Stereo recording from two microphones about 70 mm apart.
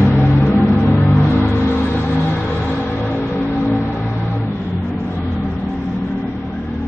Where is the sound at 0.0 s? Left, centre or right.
Left.